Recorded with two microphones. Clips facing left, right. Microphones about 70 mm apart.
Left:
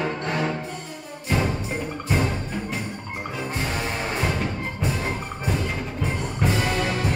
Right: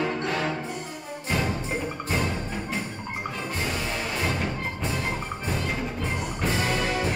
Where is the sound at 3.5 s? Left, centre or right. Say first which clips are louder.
Left 2 dB; left.